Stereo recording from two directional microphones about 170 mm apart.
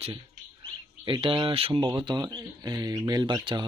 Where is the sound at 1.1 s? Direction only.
30° right (ahead or behind).